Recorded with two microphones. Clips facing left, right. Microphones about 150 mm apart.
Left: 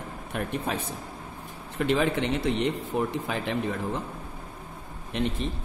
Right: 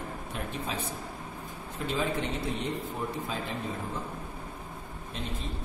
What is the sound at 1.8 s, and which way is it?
A man's voice, 70° left (ahead or behind).